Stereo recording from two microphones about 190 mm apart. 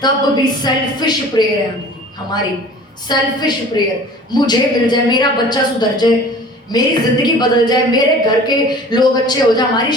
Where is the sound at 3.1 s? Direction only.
20° left (ahead or behind).